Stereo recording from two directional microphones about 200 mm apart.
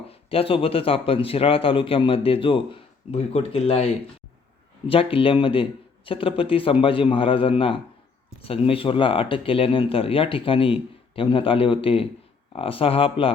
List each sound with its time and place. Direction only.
0.1 s speech: 30° left (ahead or behind)